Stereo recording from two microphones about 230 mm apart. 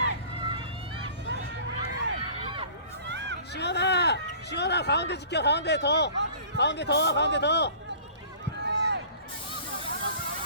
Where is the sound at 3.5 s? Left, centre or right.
Left.